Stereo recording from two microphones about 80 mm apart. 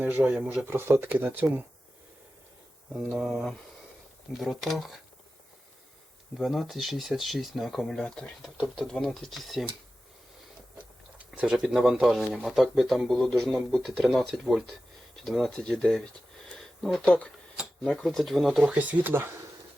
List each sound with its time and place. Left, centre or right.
0.2 s speech: centre
0.4 s speech: right
2.9 s speech: centre
6.3 s speech: centre
10.8 s chewing: centre
11.5 s speech: centre
16.5 s a sound: centre
17.8 s speech: centre
18.6 s speech: centre